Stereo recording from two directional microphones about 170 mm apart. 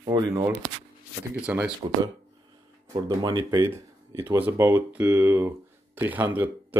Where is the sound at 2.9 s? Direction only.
20° right (ahead or behind).